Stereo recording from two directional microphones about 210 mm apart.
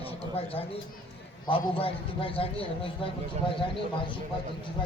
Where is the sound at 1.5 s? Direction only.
25° left (ahead or behind).